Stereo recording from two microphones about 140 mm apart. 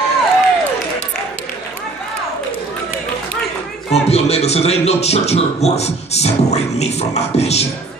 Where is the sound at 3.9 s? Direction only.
50° left (ahead or behind).